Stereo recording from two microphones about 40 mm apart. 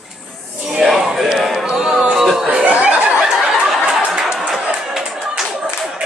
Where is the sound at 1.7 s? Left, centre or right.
Centre.